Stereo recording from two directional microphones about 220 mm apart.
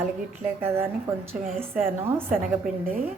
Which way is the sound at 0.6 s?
10° right (ahead or behind).